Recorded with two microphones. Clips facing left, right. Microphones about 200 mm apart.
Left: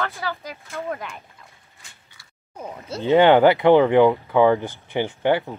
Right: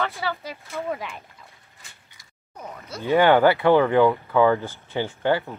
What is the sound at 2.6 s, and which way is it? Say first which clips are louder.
Speech: left 5 dB; 25° left (ahead or behind).